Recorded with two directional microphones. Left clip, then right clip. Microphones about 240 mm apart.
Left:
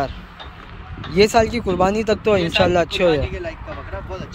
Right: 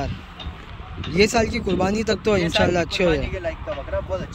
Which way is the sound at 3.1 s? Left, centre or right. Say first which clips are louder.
Left 2 dB; centre.